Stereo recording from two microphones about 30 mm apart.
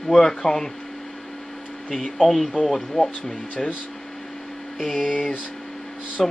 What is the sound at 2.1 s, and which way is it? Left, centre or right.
Speech, centre.